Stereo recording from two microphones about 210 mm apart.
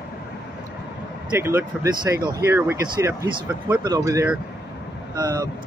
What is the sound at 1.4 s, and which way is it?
Speech, 10° right (ahead or behind).